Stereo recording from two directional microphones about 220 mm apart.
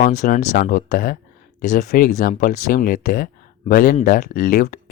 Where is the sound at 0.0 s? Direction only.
35° left (ahead or behind).